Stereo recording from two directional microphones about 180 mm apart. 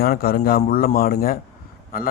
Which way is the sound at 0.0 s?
55° left (ahead or behind).